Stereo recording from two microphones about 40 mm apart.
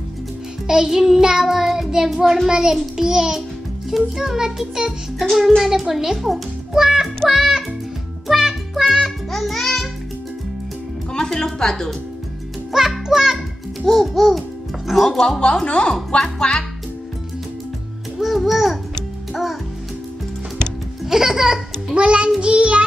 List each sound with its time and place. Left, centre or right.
0.7 s child singing: centre
6.7 s music: centre
9.3 s music: centre
11.1 s speech: centre
12.7 s a child's voice: centre
13.1 s child singing: centre
13.8 s babbling: centre
15.0 s speech: centre
18.1 s a child's voice: centre
21.0 s speech: centre
21.9 s child singing: right